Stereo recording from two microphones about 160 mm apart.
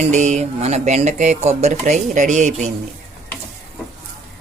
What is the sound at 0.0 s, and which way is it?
Speech, 45° right (ahead or behind).